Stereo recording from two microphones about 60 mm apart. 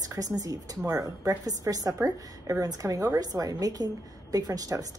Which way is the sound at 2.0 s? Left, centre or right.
Right.